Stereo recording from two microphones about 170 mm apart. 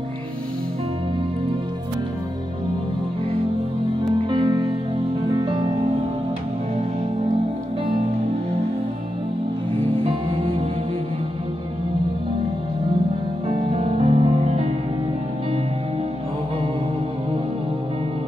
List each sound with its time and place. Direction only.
4.0 s music: 30° right (ahead or behind)
13.7 s music: 35° right (ahead or behind)